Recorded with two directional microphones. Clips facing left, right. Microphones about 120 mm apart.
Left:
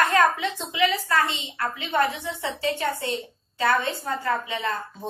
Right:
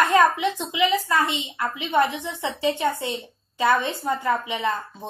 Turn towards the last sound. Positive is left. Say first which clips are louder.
# right 3 dB
turn(degrees=-15)  # may be behind; listen again after turning